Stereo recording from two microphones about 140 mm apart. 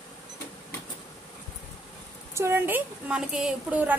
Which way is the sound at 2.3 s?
15° right (ahead or behind).